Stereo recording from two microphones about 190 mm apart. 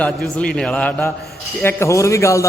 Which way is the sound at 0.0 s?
5° left (ahead or behind).